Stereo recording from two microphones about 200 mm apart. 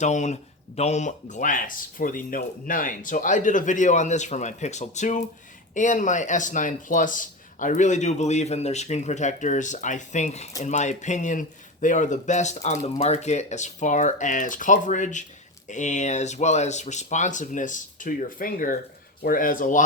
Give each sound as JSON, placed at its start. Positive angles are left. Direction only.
{"t": 0.0, "sound": "speech", "side_deg": 35}